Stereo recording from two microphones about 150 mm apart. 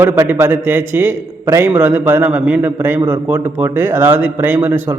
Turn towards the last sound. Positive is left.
turn(degrees=-15)  # may be behind; listen again after turning